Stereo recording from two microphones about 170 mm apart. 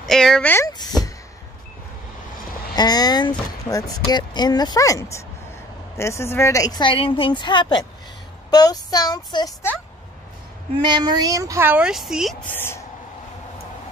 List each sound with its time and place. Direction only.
0.0 s speech: 5° left (ahead or behind); by 1.1 s 25° left (ahead or behind)
2.7 s speech: 25° left (ahead or behind)
10.8 s speech: 25° right (ahead or behind); by 12.4 s centre (ahead or behind)
12.5 s a woman's voice: 15° left (ahead or behind)